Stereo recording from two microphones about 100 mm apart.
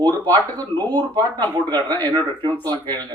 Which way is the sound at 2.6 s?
45° right (ahead or behind).